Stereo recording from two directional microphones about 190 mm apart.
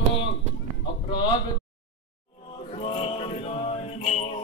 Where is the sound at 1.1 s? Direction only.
25° left (ahead or behind).